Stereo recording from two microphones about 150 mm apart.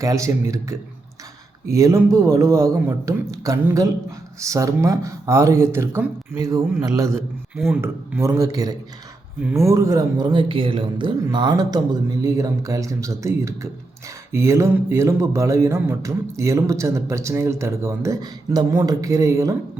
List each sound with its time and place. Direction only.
0.0 s music: 20° right (ahead or behind)
7.5 s speech: 5° right (ahead or behind)
7.8 s music: 20° right (ahead or behind)